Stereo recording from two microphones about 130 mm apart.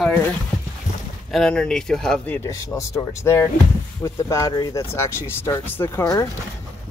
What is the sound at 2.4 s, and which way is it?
Speech, 25° left (ahead or behind).